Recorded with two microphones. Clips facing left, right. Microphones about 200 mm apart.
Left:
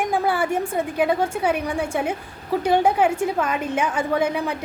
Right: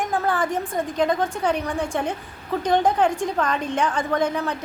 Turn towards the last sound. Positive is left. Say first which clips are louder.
# left 1 dB
turn(degrees=10)  # may be behind; listen again after turning